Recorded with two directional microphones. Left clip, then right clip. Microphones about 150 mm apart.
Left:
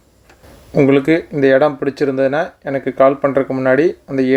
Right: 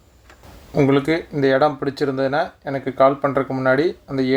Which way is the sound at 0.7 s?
25° left (ahead or behind).